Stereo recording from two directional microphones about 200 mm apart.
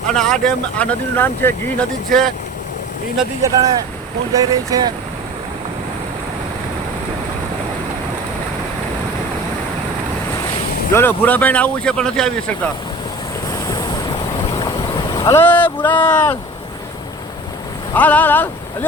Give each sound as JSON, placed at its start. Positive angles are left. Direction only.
{"t": 0.1, "sound": "speech", "side_deg": 5}
{"t": 3.4, "sound": "speech", "side_deg": -20}
{"t": 10.9, "sound": "speech", "side_deg": 10}
{"t": 13.5, "sound": "waves", "side_deg": 20}
{"t": 14.5, "sound": "boat", "side_deg": 20}
{"t": 15.4, "sound": "speech", "side_deg": 10}
{"t": 17.9, "sound": "speech", "side_deg": 10}